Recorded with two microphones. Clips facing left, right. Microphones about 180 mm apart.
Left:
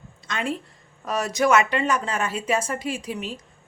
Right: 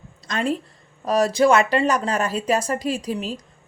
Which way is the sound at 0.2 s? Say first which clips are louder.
Right 4 dB; 35° right (ahead or behind).